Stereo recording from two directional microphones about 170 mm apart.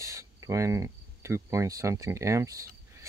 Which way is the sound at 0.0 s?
20° right (ahead or behind).